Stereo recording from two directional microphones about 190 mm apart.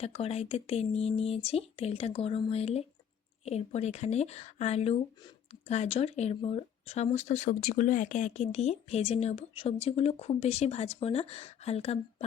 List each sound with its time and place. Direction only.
0.0 s speech: 30° left (ahead or behind)